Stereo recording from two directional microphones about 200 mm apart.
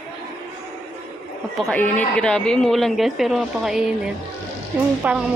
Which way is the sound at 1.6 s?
5° left (ahead or behind).